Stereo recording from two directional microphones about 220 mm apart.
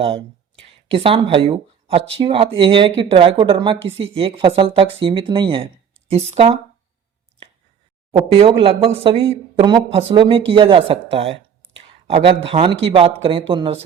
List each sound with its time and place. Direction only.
0.9 s a woman's voice: 25° right (ahead or behind)
8.1 s a woman's voice: 25° right (ahead or behind)